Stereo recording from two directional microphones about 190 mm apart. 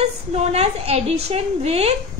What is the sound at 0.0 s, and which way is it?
A woman's voice, 35° right (ahead or behind).